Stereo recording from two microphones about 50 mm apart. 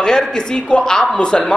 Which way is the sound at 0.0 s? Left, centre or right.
Centre.